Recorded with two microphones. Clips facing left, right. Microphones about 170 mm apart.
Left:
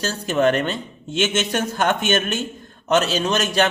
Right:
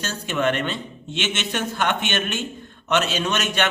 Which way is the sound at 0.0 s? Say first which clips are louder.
Left 5 dB; 35° left (ahead or behind).